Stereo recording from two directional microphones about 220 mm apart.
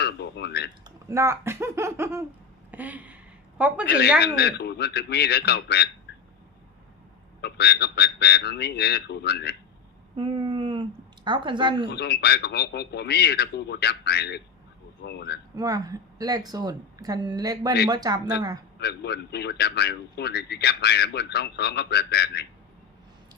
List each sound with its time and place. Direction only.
0.0 s speech: 50° left (ahead or behind)
0.9 s speech: 15° right (ahead or behind)
2.7 s a sound: 5° right (ahead or behind)
3.8 s speech: 50° left (ahead or behind)
7.4 s speech: 50° left (ahead or behind)
10.2 s speech: 20° right (ahead or behind)
11.9 s speech: 50° left (ahead or behind)
15.5 s a woman's voice: 15° right (ahead or behind)
18.8 s speech: 50° left (ahead or behind)